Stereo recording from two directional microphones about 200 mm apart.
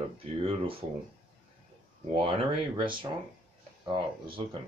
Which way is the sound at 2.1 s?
25° right (ahead or behind).